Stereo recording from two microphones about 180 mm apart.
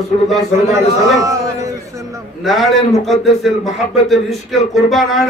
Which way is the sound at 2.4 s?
Centre (ahead or behind).